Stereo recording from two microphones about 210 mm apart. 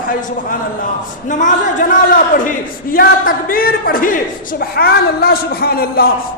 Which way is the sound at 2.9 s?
45° left (ahead or behind).